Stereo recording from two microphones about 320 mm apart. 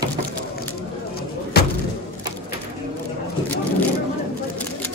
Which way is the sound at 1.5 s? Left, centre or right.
Left.